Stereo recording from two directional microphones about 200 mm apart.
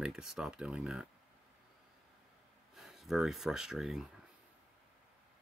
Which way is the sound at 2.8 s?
Centre (ahead or behind).